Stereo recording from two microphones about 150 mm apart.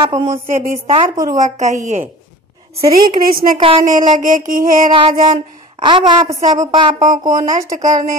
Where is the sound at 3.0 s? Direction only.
75° right (ahead or behind).